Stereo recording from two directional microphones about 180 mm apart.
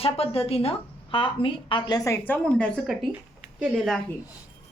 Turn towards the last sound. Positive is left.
turn(degrees=0)  # may be behind; listen again after turning